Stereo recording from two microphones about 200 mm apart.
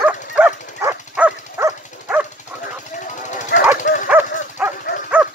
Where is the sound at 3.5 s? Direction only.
55° left (ahead or behind).